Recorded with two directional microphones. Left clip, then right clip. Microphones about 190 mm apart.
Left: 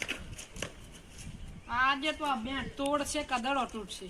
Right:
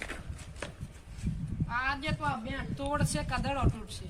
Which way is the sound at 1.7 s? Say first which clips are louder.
Left 4 dB; centre (ahead or behind).